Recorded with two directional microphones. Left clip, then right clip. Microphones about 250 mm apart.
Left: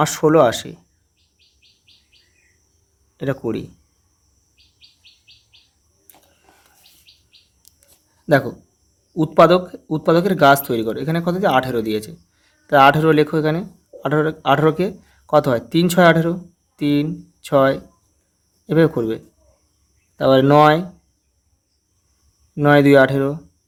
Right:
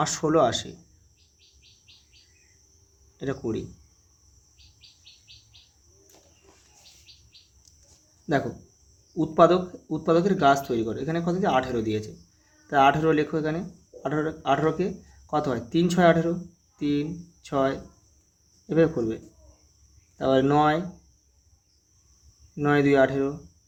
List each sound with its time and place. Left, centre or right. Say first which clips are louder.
0.0 s speech: left 8 dB; left
3.2 s speech: left 7 dB; left
9.1 s speech: left 7 dB; left
22.5 s speech: left 9 dB; left